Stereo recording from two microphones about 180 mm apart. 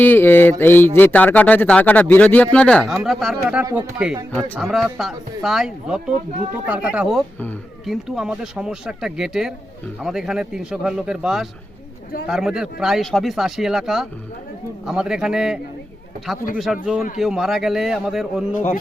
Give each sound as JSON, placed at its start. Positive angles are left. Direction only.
{"t": 0.0, "sound": "speech", "side_deg": 10}
{"t": 16.7, "sound": "speech", "side_deg": 0}
{"t": 18.5, "sound": "speech", "side_deg": 50}